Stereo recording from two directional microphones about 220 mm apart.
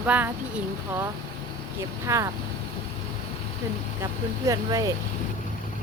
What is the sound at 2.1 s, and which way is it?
Speech, 15° right (ahead or behind).